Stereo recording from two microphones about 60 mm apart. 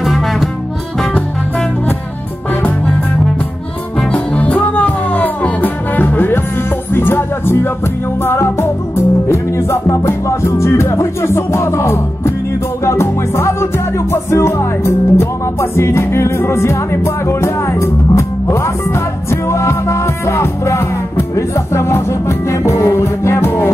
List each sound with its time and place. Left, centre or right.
0.0 s music: centre
4.1 s music: left